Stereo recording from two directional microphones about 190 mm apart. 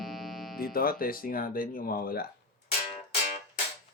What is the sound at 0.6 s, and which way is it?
Speech, 50° left (ahead or behind).